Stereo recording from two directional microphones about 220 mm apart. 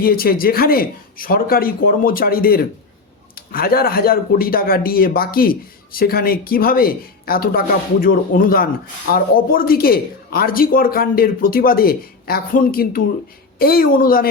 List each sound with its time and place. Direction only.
0.0 s speech: 40° left (ahead or behind)